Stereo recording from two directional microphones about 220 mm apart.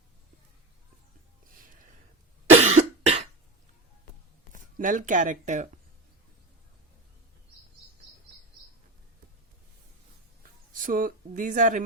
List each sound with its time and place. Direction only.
2.5 s cough: 30° right (ahead or behind)
4.5 s speech: 35° right (ahead or behind)
10.8 s speech: 40° right (ahead or behind)